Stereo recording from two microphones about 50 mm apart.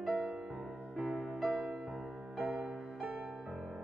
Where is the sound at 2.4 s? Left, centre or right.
Centre.